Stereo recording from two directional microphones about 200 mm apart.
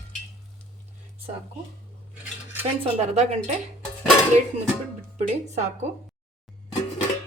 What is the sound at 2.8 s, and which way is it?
Speech, 30° right (ahead or behind).